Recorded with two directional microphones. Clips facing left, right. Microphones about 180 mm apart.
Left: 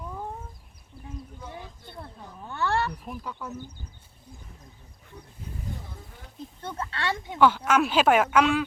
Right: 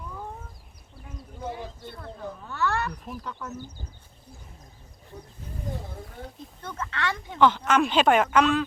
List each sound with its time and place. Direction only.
2.5 s a sound: 30° left (ahead or behind)
2.9 s speech: 5° left (ahead or behind)
6.6 s speech: 30° left (ahead or behind)
7.3 s speech: 10° left (ahead or behind)